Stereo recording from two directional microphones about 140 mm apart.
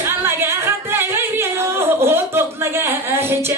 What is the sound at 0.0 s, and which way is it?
Singing, 15° right (ahead or behind).